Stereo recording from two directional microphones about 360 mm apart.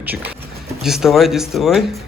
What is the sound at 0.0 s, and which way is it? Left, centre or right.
A child's voice, centre.